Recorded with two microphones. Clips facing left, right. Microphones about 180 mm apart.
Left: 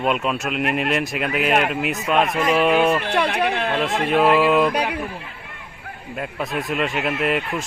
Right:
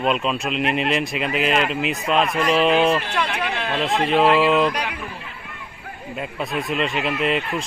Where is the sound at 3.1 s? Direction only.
35° left (ahead or behind).